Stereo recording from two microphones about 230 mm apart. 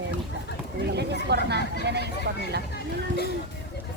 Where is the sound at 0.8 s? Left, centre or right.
Right.